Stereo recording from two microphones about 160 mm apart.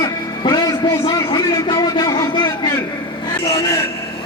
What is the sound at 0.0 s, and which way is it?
Music, 25° left (ahead or behind).